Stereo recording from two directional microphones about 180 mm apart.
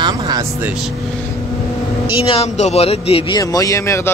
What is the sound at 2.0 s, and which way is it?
A man's voice, 30° left (ahead or behind).